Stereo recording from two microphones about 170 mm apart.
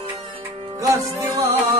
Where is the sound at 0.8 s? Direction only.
20° right (ahead or behind).